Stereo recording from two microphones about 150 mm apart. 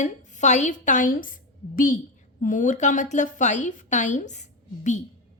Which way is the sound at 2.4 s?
60° left (ahead or behind).